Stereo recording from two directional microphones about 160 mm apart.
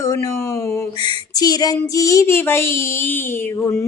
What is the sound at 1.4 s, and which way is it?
Female singing, 25° left (ahead or behind).